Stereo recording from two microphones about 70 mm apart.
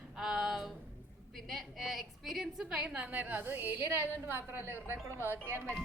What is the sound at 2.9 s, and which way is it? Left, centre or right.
A woman's voice, right.